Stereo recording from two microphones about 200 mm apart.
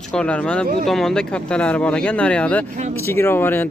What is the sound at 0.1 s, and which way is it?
Speech, 5° left (ahead or behind).